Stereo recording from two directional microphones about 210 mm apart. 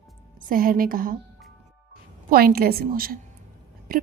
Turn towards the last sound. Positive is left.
turn(degrees=-45)  # may be behind; listen again after turning